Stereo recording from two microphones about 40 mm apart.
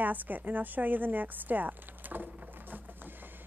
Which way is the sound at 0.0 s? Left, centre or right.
Right.